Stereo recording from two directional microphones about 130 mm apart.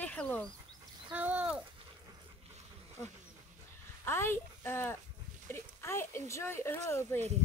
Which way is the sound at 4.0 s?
20° left (ahead or behind).